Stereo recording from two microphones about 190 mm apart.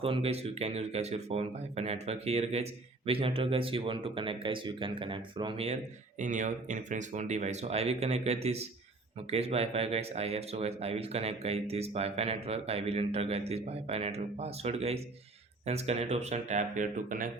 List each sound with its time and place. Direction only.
0.0 s speech: 30° right (ahead or behind)